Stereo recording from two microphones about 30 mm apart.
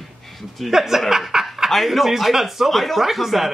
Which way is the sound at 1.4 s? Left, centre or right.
Centre.